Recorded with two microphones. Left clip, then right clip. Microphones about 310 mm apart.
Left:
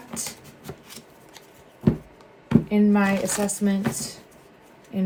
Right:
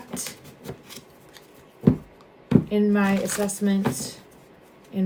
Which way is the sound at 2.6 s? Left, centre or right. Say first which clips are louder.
Left 3 dB; centre.